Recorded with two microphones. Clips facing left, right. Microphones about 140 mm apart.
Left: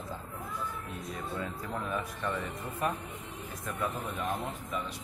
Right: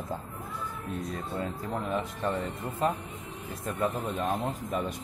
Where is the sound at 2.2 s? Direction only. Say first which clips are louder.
Right 4 dB; 40° right (ahead or behind).